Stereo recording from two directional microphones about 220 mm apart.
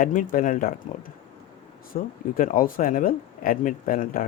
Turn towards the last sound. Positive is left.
turn(degrees=40)  # may be behind; listen again after turning